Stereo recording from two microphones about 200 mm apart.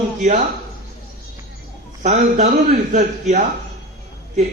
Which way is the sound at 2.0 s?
35° right (ahead or behind).